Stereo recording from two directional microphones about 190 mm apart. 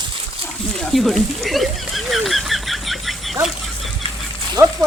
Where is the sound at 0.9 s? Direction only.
Centre (ahead or behind).